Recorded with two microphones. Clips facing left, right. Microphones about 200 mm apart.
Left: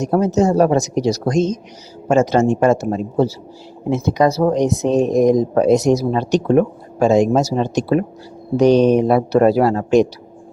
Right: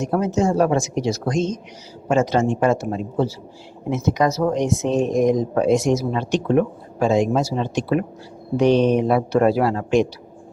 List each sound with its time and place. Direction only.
0.0 s speech: 40° left (ahead or behind)